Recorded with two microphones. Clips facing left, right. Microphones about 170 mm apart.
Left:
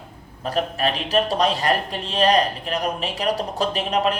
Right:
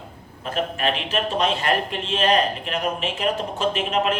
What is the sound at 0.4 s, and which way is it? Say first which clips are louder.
A man's voice: left 1 dB; 35° left (ahead or behind).